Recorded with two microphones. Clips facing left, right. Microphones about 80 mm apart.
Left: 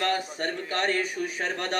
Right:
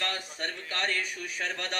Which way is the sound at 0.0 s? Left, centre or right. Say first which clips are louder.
Left 7 dB; left.